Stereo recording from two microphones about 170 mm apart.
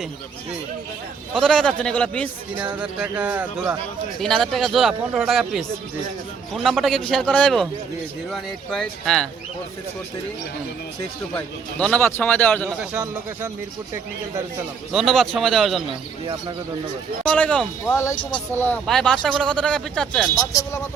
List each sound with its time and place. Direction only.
1.3 s speech: 5° left (ahead or behind)
2.7 s speech: 5° right (ahead or behind)
4.2 s speech: 5° left (ahead or behind)
11.3 s a man's voice: 10° left (ahead or behind)
14.9 s speech: centre (ahead or behind)
17.2 s a man's voice: 5° left (ahead or behind)
20.3 s speech: 20° left (ahead or behind)